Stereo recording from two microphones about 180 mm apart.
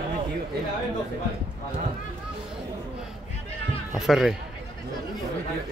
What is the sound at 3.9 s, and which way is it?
Speech, centre (ahead or behind).